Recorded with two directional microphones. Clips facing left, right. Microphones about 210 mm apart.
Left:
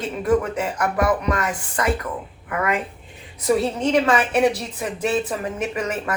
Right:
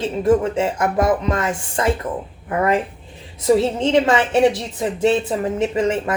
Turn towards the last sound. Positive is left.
turn(degrees=-25)  # may be behind; listen again after turning